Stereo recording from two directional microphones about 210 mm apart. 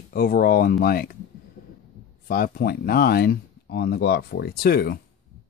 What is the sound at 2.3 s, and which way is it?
Speech, 45° left (ahead or behind).